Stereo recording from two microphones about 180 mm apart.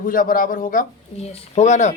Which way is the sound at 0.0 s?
50° left (ahead or behind).